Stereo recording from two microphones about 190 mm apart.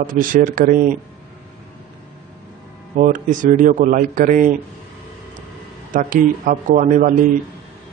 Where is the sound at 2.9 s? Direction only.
45° right (ahead or behind).